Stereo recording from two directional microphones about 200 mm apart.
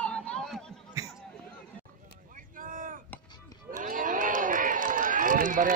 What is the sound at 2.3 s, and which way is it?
Vehicle, 45° right (ahead or behind).